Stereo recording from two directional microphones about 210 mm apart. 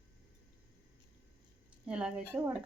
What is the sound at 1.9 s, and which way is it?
Speech, 5° right (ahead or behind).